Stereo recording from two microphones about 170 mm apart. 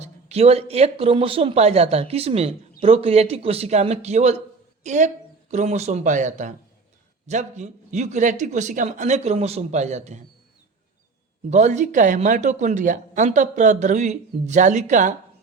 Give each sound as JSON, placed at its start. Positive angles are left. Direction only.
{"t": 0.0, "sound": "speech", "side_deg": -40}
{"t": 11.4, "sound": "speech", "side_deg": -45}